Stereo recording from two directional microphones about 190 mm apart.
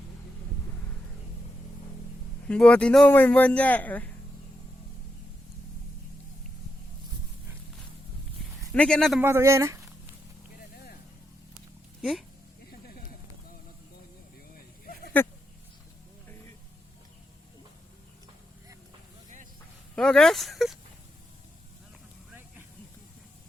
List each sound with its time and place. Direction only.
2.5 s speech: 5° left (ahead or behind)
8.6 s speech: 5° left (ahead or behind)
9.2 s speech: 15° right (ahead or behind)
14.5 s a sound: 50° left (ahead or behind)
20.0 s a sound: 5° left (ahead or behind)
22.3 s vehicle: 10° right (ahead or behind)